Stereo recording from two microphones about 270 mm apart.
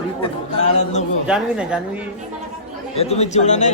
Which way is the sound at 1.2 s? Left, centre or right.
Centre.